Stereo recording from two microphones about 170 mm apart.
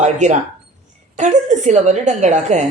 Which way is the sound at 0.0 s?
45° right (ahead or behind).